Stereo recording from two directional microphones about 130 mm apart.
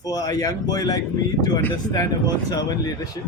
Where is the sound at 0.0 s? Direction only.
30° left (ahead or behind).